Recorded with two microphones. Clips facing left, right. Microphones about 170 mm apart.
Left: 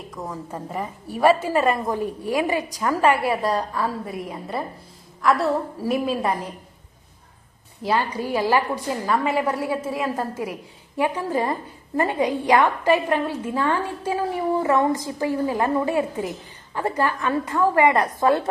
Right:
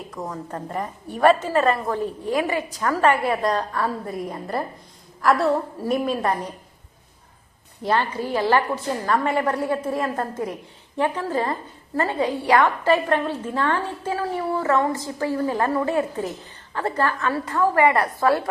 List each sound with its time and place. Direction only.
0.2 s a woman's voice: centre (ahead or behind)
7.8 s a woman's voice: 10° left (ahead or behind)